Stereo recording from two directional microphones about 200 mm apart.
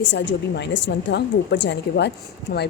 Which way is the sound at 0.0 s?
60° left (ahead or behind).